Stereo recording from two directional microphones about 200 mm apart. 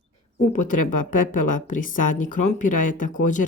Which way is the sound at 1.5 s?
40° left (ahead or behind).